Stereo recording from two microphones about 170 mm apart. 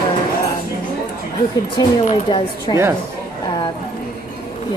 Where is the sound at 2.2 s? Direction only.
25° left (ahead or behind).